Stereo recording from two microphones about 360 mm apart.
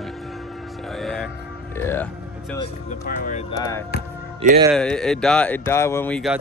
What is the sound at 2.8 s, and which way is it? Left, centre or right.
Speech, left.